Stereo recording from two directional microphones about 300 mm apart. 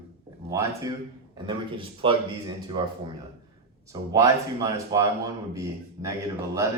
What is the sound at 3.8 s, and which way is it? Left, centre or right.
Speech, centre.